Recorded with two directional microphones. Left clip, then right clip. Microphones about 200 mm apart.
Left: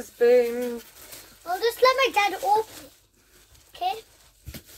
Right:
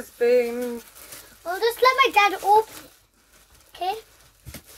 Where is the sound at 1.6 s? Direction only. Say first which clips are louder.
Right 2 dB; 40° right (ahead or behind).